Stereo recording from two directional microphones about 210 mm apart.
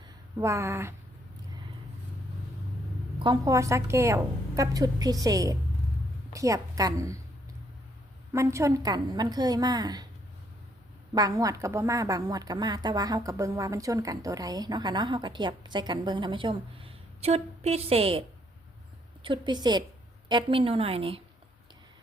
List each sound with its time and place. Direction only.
0.3 s a woman's voice: 15° right (ahead or behind)
3.2 s a woman's voice: 15° right (ahead or behind)
8.3 s a woman's voice: 15° right (ahead or behind)
11.1 s a woman's voice: 15° right (ahead or behind)